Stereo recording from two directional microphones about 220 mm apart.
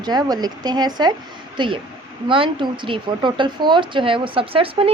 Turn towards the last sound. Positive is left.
turn(degrees=-25)  # may be behind; listen again after turning